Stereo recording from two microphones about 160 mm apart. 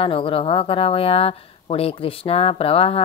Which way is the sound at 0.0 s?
35° left (ahead or behind).